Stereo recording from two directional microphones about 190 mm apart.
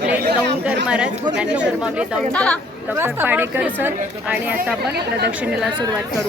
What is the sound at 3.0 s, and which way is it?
A woman's voice, 10° right (ahead or behind).